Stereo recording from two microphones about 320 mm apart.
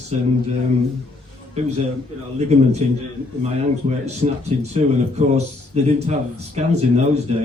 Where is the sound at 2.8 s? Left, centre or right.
Right.